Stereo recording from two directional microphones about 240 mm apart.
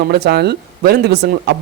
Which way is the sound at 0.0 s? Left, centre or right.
Right.